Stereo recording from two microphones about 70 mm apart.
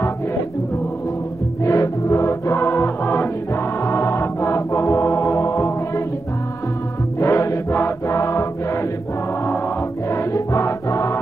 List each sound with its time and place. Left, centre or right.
1.6 s music: left
3.8 s music: left
7.2 s music: left
10.1 s music: left